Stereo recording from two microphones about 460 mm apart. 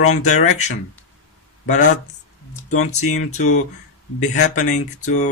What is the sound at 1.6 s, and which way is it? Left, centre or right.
Speech, centre.